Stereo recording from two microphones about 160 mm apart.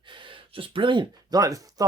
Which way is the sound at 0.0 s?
30° right (ahead or behind).